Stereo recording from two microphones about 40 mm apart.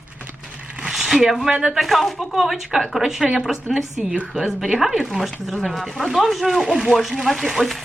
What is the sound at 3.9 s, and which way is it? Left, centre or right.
Speech, right.